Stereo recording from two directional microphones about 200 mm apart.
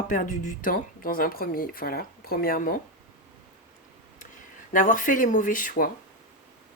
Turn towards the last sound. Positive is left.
turn(degrees=45)  # may be behind; listen again after turning